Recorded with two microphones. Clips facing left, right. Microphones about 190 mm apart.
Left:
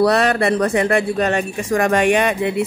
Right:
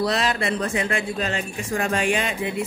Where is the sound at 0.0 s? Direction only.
65° left (ahead or behind).